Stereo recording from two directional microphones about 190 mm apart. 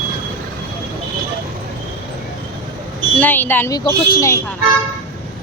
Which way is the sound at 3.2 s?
10° left (ahead or behind).